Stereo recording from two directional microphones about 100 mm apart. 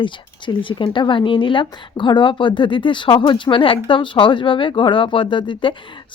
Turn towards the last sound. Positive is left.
turn(degrees=55)  # may be behind; listen again after turning